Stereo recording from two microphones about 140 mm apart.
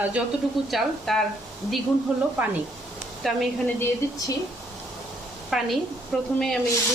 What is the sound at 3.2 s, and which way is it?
Speech, centre (ahead or behind).